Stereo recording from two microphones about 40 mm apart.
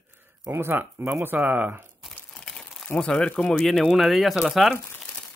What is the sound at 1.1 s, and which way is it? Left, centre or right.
Speech, right.